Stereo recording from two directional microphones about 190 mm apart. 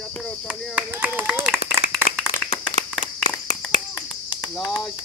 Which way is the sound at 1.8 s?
50° left (ahead or behind).